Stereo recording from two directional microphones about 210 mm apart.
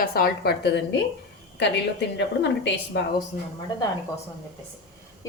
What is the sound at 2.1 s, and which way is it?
Speech, 55° left (ahead or behind).